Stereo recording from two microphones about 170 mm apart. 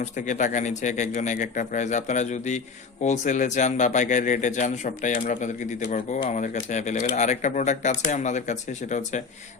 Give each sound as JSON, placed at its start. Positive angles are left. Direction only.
{"t": 0.0, "sound": "a man's voice", "side_deg": 45}